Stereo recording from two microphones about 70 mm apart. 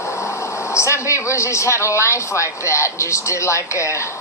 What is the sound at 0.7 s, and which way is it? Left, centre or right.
Speech, left.